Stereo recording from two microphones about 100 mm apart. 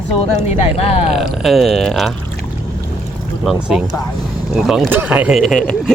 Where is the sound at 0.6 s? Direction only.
85° left.